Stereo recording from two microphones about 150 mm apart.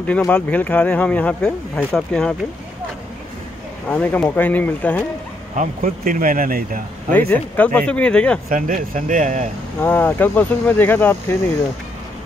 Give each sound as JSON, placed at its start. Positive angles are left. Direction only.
{"t": 0.3, "sound": "speech", "side_deg": 10}
{"t": 3.9, "sound": "speech", "side_deg": 10}
{"t": 5.6, "sound": "speech", "side_deg": -65}
{"t": 7.1, "sound": "speech", "side_deg": 10}
{"t": 8.5, "sound": "speech", "side_deg": -65}
{"t": 9.8, "sound": "speech", "side_deg": 10}